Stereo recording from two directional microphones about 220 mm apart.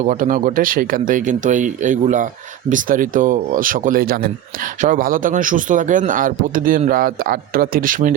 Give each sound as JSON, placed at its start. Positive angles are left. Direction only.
{"t": 0.0, "sound": "a man's voice", "side_deg": -35}